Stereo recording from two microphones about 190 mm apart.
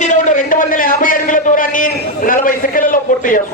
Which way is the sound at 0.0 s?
40° left (ahead or behind).